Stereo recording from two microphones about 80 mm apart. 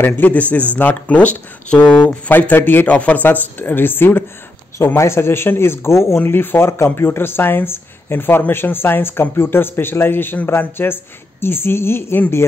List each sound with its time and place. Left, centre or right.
0.0 s speech: left
2.3 s speech: left